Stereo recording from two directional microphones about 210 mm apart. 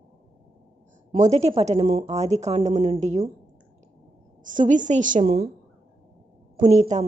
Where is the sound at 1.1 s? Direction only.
35° right (ahead or behind).